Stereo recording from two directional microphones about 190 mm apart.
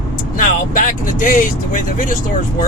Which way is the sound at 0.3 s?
45° left (ahead or behind).